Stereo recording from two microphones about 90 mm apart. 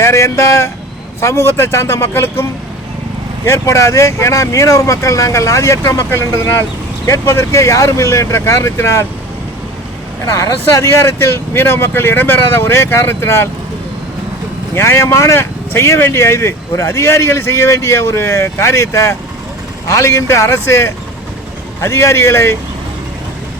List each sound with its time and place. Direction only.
0.0 s speech: 30° left (ahead or behind)
10.3 s speech: 35° left (ahead or behind)
14.8 s speech: 30° left (ahead or behind)